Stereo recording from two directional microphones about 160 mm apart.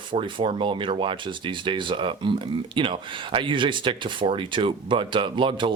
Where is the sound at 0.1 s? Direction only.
30° right (ahead or behind).